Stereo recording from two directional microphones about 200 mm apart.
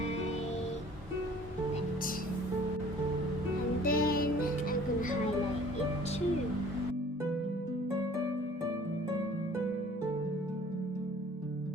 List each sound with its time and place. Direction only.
3.8 s music: 45° left (ahead or behind)